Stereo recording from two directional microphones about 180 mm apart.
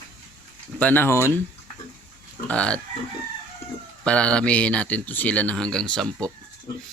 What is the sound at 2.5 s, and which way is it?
Speech, 5° left (ahead or behind).